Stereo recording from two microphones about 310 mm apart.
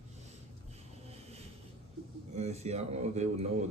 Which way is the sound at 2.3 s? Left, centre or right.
Right.